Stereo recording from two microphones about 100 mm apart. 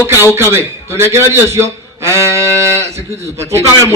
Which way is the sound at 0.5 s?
25° right (ahead or behind).